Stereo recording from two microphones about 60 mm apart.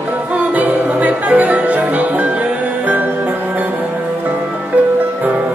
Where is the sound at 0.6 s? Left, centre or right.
Right.